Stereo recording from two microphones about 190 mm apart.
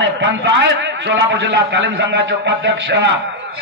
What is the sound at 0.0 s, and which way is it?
A man's voice, 70° right (ahead or behind).